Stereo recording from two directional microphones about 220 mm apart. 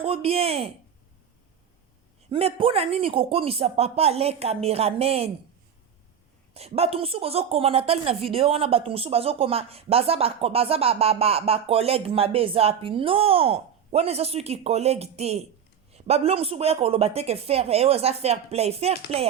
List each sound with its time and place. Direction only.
0.0 s a woman's voice: 25° right (ahead or behind)
2.3 s a woman's voice: 25° right (ahead or behind)
6.5 s a woman's voice: 30° right (ahead or behind)